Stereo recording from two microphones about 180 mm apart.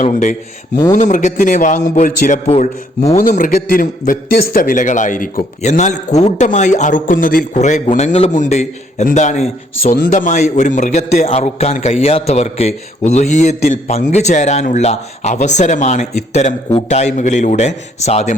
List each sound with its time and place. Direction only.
0.0 s a man's voice: 40° left (ahead or behind)
3.2 s a man's voice: 50° left (ahead or behind)
9.8 s a man's voice: 50° left (ahead or behind)